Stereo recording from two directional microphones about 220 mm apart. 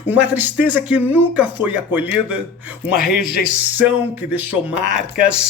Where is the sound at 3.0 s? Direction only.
45° left (ahead or behind).